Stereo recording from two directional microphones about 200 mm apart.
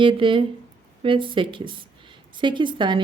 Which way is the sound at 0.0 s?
25° right (ahead or behind).